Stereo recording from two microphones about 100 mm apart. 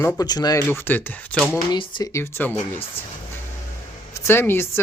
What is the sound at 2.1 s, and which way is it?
Speech, 25° left (ahead or behind).